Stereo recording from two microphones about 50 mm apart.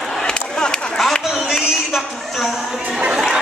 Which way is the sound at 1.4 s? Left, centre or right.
Centre.